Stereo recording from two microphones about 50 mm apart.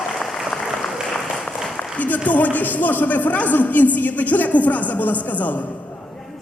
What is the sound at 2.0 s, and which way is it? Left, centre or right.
A man's voice, left.